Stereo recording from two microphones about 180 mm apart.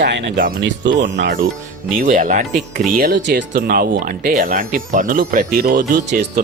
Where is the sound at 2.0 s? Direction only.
50° right (ahead or behind).